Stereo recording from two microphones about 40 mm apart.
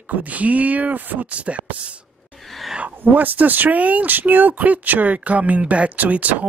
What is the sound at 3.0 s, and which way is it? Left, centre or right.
Speech, right.